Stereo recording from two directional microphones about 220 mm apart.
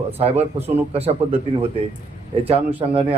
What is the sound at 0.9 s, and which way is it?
Speech, 25° right (ahead or behind).